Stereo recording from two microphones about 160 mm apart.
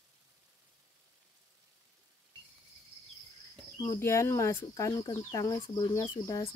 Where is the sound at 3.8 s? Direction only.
20° left (ahead or behind).